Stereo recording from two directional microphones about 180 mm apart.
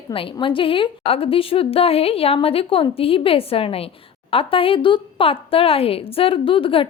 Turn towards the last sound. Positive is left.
turn(degrees=30)  # may be behind; listen again after turning